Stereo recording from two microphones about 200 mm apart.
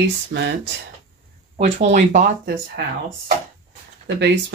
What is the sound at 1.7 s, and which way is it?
Speech, 35° right (ahead or behind).